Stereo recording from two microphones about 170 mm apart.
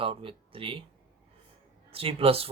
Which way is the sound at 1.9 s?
35° right (ahead or behind).